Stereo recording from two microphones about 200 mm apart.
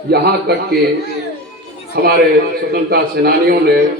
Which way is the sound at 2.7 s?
50° right (ahead or behind).